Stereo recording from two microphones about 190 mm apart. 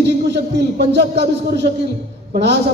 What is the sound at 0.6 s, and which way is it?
A man's voice, 65° right (ahead or behind).